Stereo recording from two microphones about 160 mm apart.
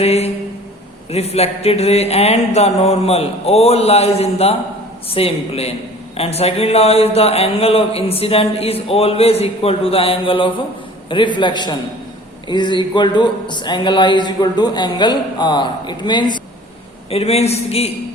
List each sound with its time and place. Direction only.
0.0 s speech: 40° left (ahead or behind)
11.1 s a sound: 30° left (ahead or behind)
17.1 s speech: 40° left (ahead or behind)